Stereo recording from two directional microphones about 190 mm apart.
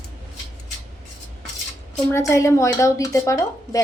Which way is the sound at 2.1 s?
15° left (ahead or behind).